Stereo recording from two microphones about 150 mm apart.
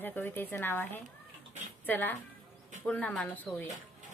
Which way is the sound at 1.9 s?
10° left (ahead or behind).